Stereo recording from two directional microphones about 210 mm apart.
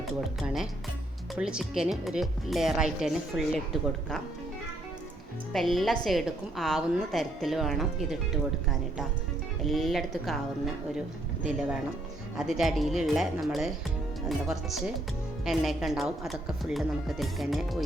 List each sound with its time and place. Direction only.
0.2 s speech: centre (ahead or behind)
5.5 s speech: centre (ahead or behind)
9.6 s speech: centre (ahead or behind)
12.4 s speech: centre (ahead or behind)